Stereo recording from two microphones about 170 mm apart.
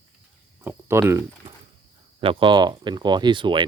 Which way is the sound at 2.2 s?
30° right (ahead or behind).